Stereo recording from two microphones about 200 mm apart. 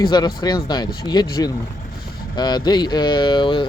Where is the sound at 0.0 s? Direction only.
20° left (ahead or behind).